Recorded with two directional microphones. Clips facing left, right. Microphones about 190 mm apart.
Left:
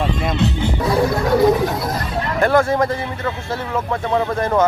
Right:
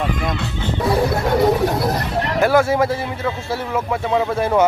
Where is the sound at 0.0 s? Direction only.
25° left (ahead or behind).